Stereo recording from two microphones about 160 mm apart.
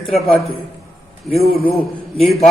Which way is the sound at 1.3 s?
40° left (ahead or behind).